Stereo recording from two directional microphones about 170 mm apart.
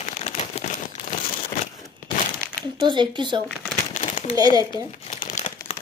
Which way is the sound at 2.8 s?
25° right (ahead or behind).